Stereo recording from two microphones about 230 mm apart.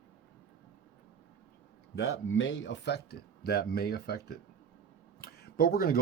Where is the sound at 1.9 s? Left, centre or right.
Left.